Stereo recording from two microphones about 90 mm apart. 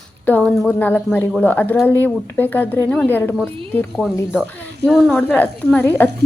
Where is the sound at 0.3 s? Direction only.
20° left (ahead or behind).